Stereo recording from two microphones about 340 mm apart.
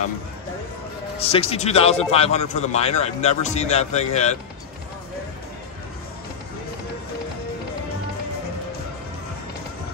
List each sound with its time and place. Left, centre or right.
1.2 s a man's voice: centre